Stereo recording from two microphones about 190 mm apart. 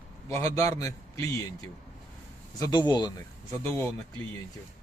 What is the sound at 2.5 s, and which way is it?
Speech, 20° left (ahead or behind).